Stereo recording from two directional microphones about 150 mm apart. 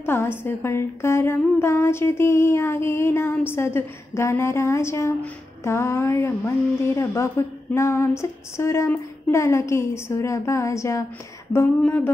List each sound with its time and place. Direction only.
0.0 s a woman's voice: 15° left (ahead or behind)